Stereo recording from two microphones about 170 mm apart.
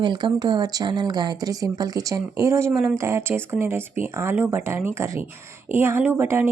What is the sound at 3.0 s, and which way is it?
Speech, 15° right (ahead or behind).